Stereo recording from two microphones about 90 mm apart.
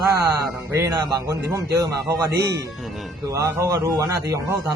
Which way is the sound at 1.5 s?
45° right (ahead or behind).